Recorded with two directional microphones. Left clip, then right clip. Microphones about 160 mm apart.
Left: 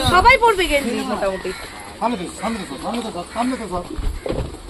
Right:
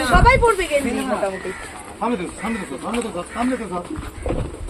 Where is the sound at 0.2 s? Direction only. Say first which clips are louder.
Left 4 dB; 55° left (ahead or behind).